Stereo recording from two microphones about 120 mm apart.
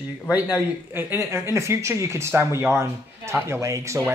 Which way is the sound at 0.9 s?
20° right (ahead or behind).